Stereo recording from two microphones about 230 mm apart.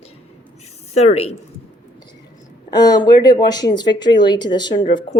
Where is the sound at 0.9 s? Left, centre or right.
Left.